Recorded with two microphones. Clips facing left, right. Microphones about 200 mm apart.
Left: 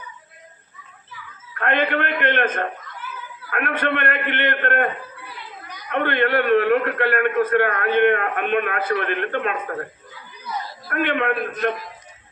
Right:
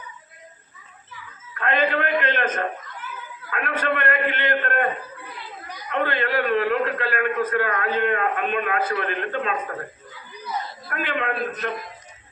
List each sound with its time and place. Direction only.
1.5 s a man's voice: 60° left (ahead or behind)
5.9 s a man's voice: 60° left (ahead or behind)
10.8 s a man's voice: 60° left (ahead or behind)